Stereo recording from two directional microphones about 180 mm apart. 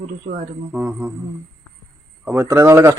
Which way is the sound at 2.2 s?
15° right (ahead or behind).